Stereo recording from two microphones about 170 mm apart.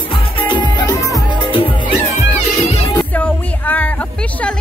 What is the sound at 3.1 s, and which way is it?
Music, 10° left (ahead or behind).